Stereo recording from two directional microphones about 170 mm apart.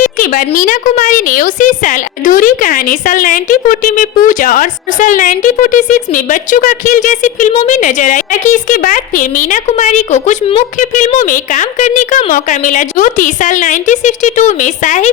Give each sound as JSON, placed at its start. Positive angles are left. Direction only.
{"t": 0.0, "sound": "a woman's voice", "side_deg": 50}